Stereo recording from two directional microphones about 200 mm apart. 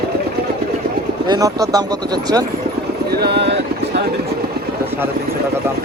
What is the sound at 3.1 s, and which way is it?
Vehicle, 55° right (ahead or behind).